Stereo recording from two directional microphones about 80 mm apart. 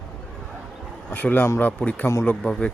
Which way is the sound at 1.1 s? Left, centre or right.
Left.